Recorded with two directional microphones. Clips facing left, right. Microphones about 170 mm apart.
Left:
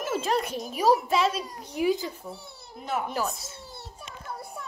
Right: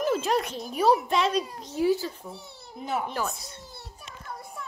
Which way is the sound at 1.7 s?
15° left (ahead or behind).